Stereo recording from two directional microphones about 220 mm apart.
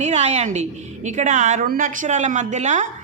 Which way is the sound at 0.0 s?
30° right (ahead or behind).